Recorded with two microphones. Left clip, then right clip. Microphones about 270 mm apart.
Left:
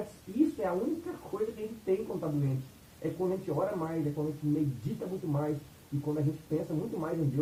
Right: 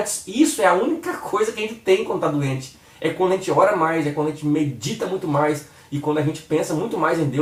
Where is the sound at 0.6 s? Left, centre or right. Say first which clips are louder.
Right 15 dB; centre.